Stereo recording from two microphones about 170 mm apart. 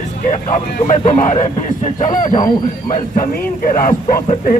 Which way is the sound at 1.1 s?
45° left (ahead or behind).